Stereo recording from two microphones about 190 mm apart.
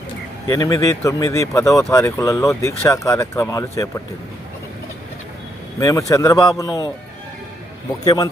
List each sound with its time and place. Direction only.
0.5 s speech: 20° left (ahead or behind)
5.8 s speech: 15° left (ahead or behind)
8.0 s a man's voice: 20° left (ahead or behind)